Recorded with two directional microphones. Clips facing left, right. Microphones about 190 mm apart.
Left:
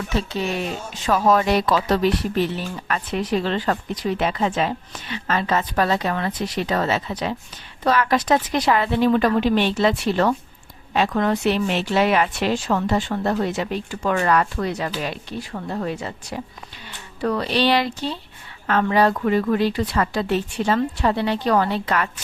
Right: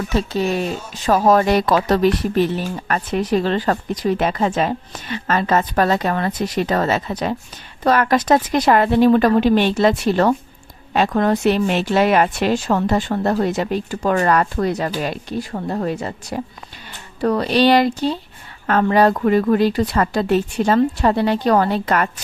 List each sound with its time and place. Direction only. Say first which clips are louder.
0.1 s speech: right 5 dB; 40° right (ahead or behind)